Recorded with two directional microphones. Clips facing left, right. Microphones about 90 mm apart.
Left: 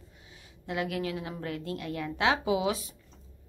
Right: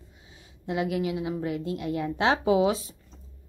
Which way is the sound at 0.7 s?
25° right (ahead or behind).